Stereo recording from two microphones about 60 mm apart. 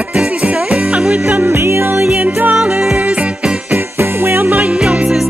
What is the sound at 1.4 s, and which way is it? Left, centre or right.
Music, right.